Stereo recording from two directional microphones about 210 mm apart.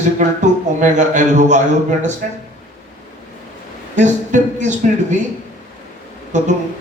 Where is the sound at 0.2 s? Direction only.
35° right (ahead or behind).